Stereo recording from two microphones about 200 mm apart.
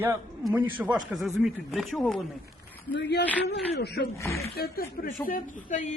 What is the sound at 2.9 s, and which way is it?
Speech, 60° left (ahead or behind).